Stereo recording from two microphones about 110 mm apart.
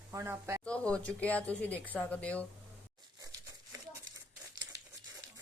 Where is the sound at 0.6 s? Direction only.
10° left (ahead or behind).